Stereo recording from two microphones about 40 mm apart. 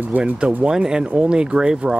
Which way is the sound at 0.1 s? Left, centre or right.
Right.